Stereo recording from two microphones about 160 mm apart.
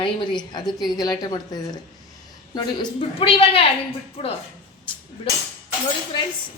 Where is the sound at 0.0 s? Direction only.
30° left (ahead or behind).